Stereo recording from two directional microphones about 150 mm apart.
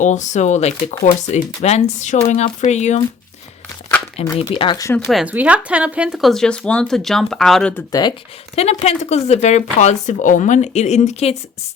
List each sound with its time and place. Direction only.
0.0 s speech: 55° left (ahead or behind)
4.2 s speech: 40° left (ahead or behind)
4.9 s speech: centre (ahead or behind)
7.9 s speech: 25° left (ahead or behind)
8.5 s speech: 45° left (ahead or behind)